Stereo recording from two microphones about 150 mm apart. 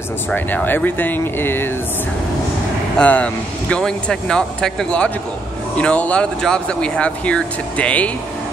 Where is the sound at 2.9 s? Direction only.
10° left (ahead or behind).